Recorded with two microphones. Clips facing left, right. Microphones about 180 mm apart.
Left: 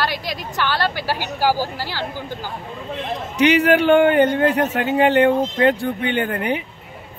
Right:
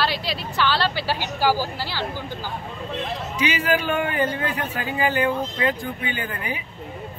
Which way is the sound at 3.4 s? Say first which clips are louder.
Left 9 dB; 65° left (ahead or behind).